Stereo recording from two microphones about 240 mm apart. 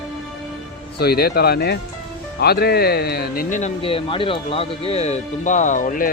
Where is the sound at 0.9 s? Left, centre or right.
Left.